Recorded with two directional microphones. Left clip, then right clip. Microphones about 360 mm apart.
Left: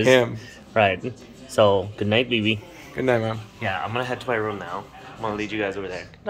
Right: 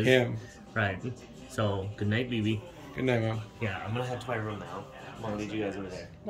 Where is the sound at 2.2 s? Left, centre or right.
Centre.